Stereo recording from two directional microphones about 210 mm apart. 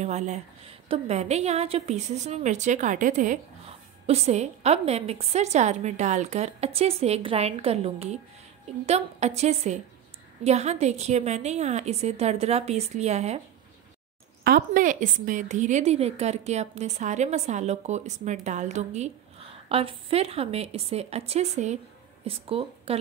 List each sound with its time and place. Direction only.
0.0 s a woman's voice: 35° right (ahead or behind)
14.4 s a woman's voice: 45° right (ahead or behind); by 22.9 s 25° right (ahead or behind)